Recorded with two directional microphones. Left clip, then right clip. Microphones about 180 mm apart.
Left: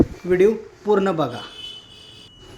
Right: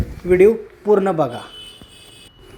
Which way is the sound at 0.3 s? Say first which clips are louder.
Right 6 dB; 5° right (ahead or behind).